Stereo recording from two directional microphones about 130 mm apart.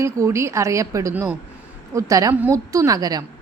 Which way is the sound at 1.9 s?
25° right (ahead or behind).